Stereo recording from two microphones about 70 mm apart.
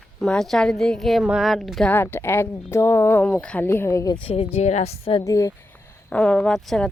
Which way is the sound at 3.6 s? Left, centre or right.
Left.